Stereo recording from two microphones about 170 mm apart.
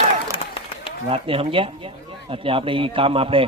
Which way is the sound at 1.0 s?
35° right (ahead or behind).